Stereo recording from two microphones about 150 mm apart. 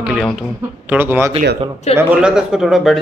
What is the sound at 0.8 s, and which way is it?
Speech, 15° right (ahead or behind).